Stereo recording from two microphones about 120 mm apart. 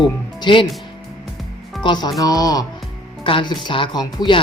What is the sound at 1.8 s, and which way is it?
Speech, 40° left (ahead or behind).